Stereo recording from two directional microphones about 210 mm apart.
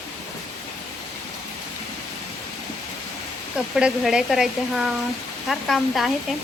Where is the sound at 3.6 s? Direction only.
5° right (ahead or behind).